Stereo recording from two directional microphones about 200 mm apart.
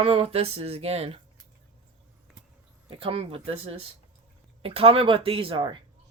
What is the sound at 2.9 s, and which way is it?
Speech, 25° right (ahead or behind).